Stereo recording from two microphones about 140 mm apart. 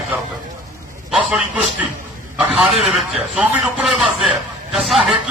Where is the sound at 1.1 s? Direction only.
5° right (ahead or behind).